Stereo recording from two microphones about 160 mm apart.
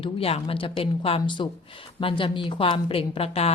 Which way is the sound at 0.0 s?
35° left (ahead or behind).